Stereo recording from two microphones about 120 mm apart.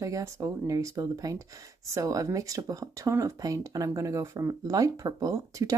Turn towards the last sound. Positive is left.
turn(degrees=-30)  # may be behind; listen again after turning